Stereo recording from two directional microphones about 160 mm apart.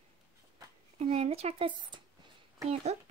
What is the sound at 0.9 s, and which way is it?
Speech, 40° right (ahead or behind).